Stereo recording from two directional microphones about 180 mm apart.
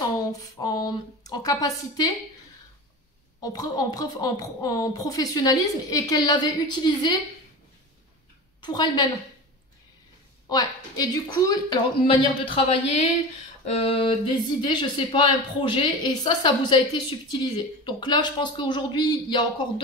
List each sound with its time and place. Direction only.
0.6 s speech: 20° left (ahead or behind)
3.3 s speech: 20° left (ahead or behind)
8.5 s a woman's voice: 25° left (ahead or behind)
10.5 s speech: 20° left (ahead or behind)